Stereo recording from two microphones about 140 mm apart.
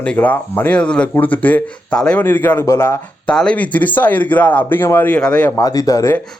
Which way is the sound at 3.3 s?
5° left (ahead or behind).